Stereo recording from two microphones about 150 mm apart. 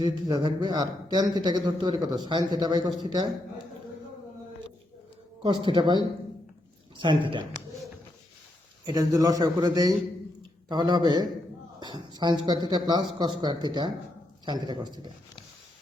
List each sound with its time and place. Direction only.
0.0 s a man's voice: 30° right (ahead or behind)
5.4 s a woman's voice: 30° right (ahead or behind)
8.9 s a man's voice: 25° right (ahead or behind)